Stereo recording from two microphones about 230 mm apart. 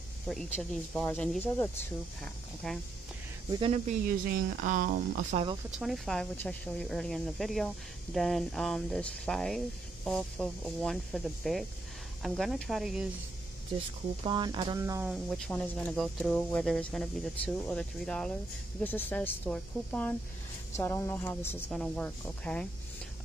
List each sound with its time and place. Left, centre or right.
0.3 s a woman's voice: centre
3.5 s speech: right
4.3 s speech: right
5.8 s a woman's voice: centre
14.2 s speech: centre
15.2 s a woman's voice: centre